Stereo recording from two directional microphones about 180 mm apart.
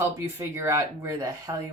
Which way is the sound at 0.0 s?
15° right (ahead or behind).